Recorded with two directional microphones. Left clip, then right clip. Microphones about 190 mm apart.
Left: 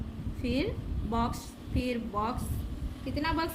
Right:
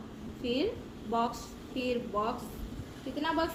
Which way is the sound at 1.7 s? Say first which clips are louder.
Right 1 dB; 35° left (ahead or behind).